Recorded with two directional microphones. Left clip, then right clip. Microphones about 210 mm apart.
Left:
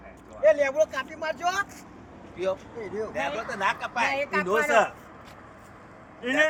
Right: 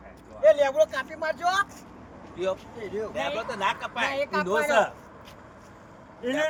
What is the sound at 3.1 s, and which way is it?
Speech, 10° right (ahead or behind).